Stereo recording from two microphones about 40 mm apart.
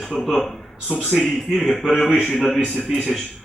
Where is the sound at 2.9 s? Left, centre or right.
Centre.